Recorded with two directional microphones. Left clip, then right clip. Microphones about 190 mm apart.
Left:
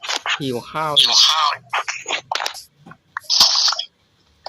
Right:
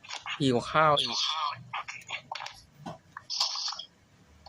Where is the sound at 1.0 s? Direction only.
50° left (ahead or behind).